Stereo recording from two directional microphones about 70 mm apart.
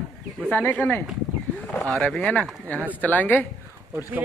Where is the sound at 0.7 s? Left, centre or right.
Left.